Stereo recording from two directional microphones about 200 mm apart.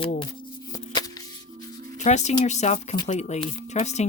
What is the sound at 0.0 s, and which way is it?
Speech, 25° left (ahead or behind).